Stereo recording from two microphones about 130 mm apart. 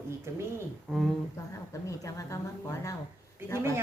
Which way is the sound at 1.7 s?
25° left (ahead or behind).